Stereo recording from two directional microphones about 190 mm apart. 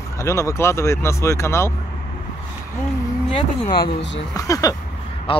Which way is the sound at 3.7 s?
60° left (ahead or behind).